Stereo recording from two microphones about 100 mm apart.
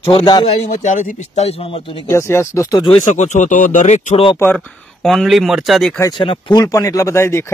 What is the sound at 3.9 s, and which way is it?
Speech, 70° left (ahead or behind).